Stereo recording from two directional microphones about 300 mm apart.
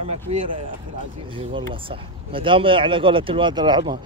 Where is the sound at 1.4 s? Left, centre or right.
Centre.